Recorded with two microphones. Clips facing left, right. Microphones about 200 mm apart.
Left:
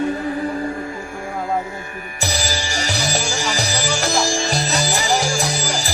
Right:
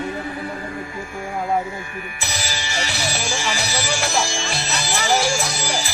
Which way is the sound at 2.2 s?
40° left (ahead or behind).